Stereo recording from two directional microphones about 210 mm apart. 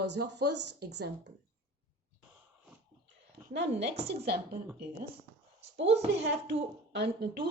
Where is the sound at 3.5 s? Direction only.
55° right (ahead or behind).